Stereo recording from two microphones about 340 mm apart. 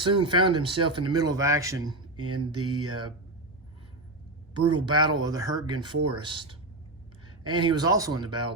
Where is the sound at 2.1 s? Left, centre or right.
Right.